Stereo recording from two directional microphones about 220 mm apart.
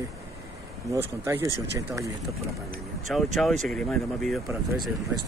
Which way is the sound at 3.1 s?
Centre (ahead or behind).